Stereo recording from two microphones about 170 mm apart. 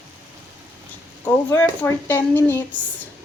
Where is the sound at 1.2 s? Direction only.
10° left (ahead or behind).